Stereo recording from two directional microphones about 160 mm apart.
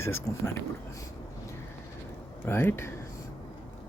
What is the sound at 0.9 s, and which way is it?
Vehicle, 20° left (ahead or behind).